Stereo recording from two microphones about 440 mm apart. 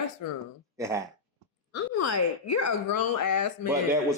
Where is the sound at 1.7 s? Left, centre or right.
Left.